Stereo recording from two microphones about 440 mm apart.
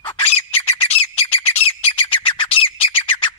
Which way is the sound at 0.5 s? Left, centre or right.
Centre.